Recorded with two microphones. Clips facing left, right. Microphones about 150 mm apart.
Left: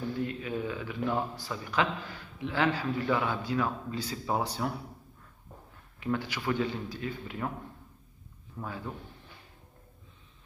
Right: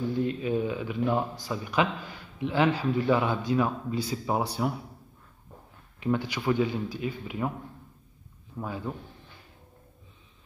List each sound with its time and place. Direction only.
0.2 s speech: 25° right (ahead or behind)
5.9 s speech: 20° right (ahead or behind)
8.5 s speech: 15° right (ahead or behind)